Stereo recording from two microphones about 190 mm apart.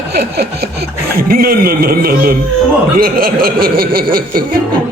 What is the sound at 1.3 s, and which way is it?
Speech, 50° right (ahead or behind).